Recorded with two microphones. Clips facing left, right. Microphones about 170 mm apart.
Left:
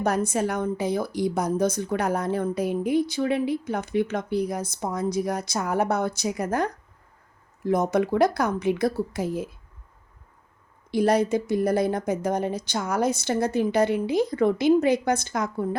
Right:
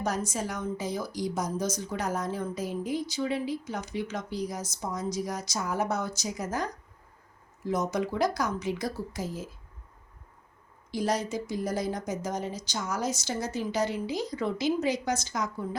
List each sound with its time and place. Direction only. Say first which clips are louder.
0.0 s a woman's voice: left 7 dB; 60° left (ahead or behind)
10.9 s a woman's voice: left 8 dB; 60° left (ahead or behind)